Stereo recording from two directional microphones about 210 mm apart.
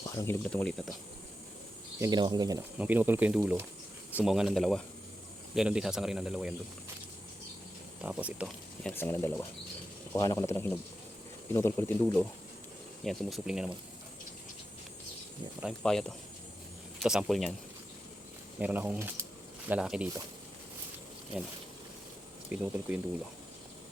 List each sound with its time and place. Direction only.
0.1 s speech: 10° left (ahead or behind)
2.0 s speech: 20° right (ahead or behind)
2.7 s speech: 10° right (ahead or behind)
8.0 s speech: 5° right (ahead or behind)
9.0 s speech: 10° left (ahead or behind)
15.6 s speech: centre (ahead or behind)
18.6 s speech: 10° right (ahead or behind)
22.4 s speech: 5° right (ahead or behind)